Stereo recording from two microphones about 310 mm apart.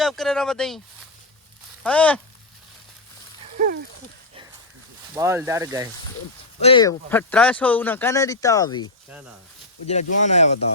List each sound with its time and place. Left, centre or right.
0.0 s speech: centre
1.8 s speech: centre
3.6 s speech: right
5.1 s speech: centre
6.6 s speech: centre
9.8 s speech: left